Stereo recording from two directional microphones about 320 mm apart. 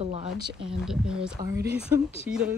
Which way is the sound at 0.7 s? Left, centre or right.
Centre.